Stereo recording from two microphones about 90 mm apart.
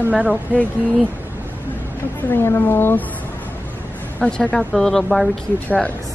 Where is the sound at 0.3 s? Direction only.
15° left (ahead or behind).